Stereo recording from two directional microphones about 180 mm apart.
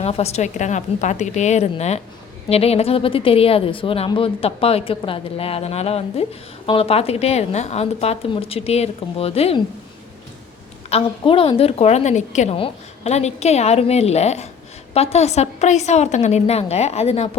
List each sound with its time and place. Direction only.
0.0 s a woman's voice: 35° left (ahead or behind)
10.8 s a woman's voice: 30° left (ahead or behind)